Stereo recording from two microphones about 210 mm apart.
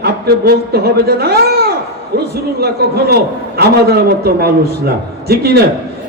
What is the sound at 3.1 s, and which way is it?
A man's voice, 50° right (ahead or behind).